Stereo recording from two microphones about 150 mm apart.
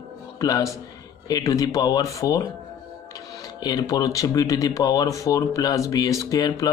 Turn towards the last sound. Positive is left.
turn(degrees=25)  # may be behind; listen again after turning